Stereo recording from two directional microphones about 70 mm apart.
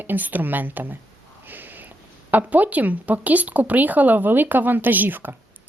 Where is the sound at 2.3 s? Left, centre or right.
Right.